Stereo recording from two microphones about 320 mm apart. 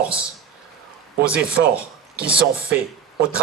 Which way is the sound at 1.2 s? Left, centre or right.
Centre.